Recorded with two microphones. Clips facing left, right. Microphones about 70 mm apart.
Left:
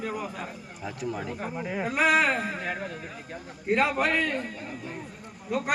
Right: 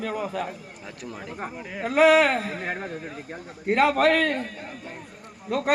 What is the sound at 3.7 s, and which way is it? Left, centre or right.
Speech, right.